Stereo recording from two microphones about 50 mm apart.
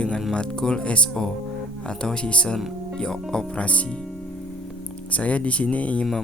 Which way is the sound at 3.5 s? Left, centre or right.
Left.